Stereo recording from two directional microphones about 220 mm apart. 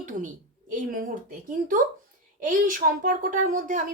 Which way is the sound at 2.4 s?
35° right (ahead or behind).